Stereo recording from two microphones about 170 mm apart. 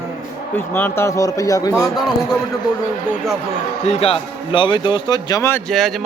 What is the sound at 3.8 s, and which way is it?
A man's voice, 35° left (ahead or behind).